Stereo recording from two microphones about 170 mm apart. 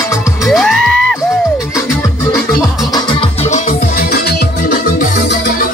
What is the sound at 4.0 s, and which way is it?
Music, 65° left (ahead or behind).